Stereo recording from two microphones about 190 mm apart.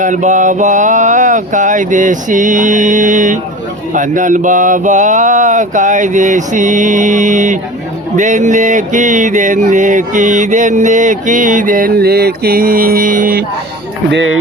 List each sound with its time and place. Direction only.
0.0 s mantra: 40° right (ahead or behind)
14.1 s speech: 75° right (ahead or behind)